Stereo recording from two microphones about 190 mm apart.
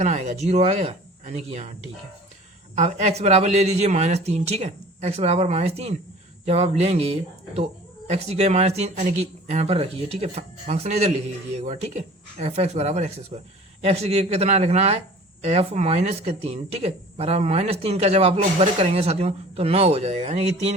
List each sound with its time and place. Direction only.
0.0 s speech: 35° right (ahead or behind)
2.7 s speech: 35° right (ahead or behind)